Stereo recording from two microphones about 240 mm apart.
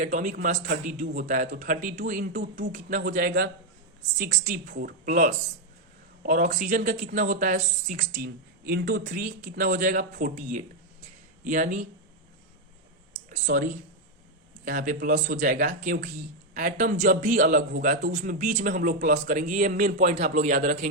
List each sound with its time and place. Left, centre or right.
0.0 s speech: right
8.2 s speech: right
13.3 s speech: right